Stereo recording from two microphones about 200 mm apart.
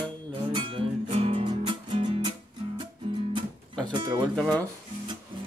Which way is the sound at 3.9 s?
25° right (ahead or behind).